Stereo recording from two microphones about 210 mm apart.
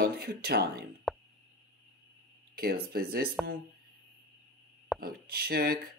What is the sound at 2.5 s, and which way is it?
Speech, 45° right (ahead or behind).